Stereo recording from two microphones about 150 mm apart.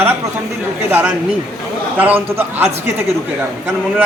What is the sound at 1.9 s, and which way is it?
A man's voice, 10° right (ahead or behind).